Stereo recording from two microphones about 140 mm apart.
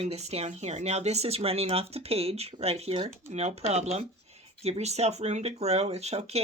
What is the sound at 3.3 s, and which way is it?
Speech, 50° right (ahead or behind).